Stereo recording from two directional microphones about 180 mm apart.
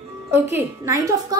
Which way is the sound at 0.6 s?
15° right (ahead or behind).